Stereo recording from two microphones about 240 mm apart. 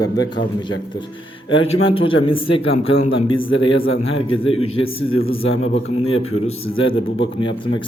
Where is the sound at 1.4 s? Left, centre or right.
Left.